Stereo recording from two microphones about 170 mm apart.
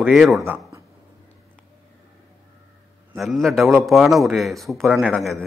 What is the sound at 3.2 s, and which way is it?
A man's voice, centre (ahead or behind).